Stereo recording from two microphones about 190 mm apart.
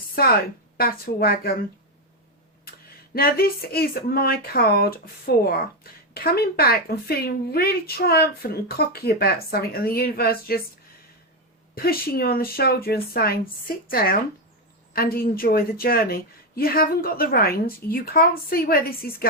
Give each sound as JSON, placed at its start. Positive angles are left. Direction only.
{"t": 0.2, "sound": "speech", "side_deg": 55}
{"t": 3.2, "sound": "speech", "side_deg": 50}
{"t": 11.7, "sound": "speech", "side_deg": 50}